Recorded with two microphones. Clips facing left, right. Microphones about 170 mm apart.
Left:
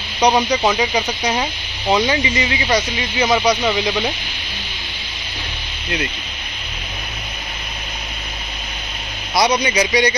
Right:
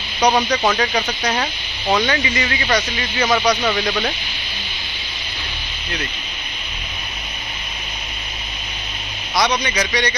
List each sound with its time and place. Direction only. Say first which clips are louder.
0.2 s speech: left 1 dB; 15° left (ahead or behind)
9.4 s a man's voice: left 3 dB; 15° left (ahead or behind)